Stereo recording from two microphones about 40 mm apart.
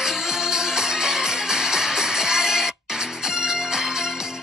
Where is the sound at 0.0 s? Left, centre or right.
Centre.